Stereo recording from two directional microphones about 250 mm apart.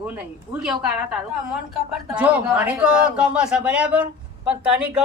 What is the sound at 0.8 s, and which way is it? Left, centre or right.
Speech, centre.